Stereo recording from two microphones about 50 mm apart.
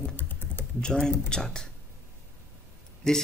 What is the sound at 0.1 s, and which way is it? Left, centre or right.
Typing, left.